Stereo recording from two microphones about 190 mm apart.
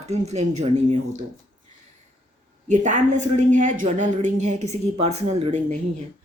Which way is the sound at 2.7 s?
40° right (ahead or behind).